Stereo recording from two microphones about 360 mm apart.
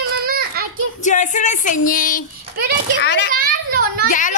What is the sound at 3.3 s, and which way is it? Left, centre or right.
Children playing, right.